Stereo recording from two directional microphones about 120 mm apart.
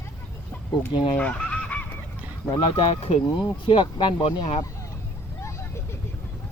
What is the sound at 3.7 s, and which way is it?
Speech, 40° left (ahead or behind).